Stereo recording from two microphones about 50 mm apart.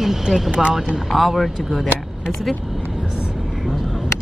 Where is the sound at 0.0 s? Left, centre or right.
Centre.